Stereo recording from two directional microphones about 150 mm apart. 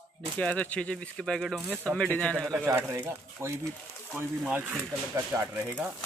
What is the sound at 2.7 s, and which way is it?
Speech, 15° right (ahead or behind).